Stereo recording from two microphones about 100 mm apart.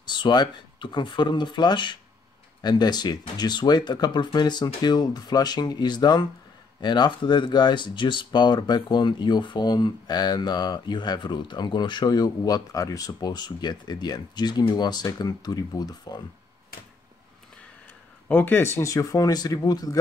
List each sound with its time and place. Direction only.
0.0 s speech: 50° left (ahead or behind)
18.3 s speech: 20° left (ahead or behind); by 20.0 s 40° left (ahead or behind)